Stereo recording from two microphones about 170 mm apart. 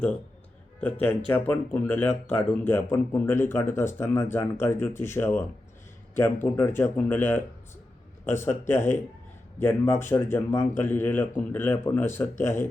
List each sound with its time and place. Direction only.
0.8 s speech: 10° left (ahead or behind)